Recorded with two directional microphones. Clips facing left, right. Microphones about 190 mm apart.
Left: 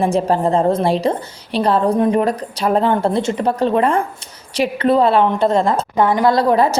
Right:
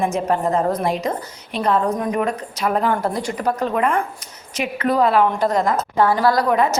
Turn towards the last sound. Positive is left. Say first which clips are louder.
# left 3 dB
turn(degrees=30)  # may be behind; listen again after turning